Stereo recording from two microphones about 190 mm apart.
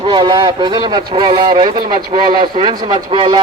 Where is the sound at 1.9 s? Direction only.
45° right (ahead or behind).